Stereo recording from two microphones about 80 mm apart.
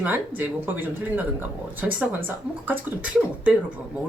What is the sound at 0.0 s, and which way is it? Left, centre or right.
Speech, right.